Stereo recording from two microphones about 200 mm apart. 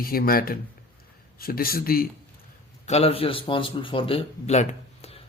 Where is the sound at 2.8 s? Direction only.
30° left (ahead or behind).